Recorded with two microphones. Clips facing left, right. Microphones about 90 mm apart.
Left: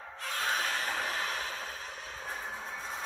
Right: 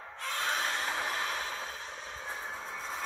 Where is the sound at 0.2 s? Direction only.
30° right (ahead or behind).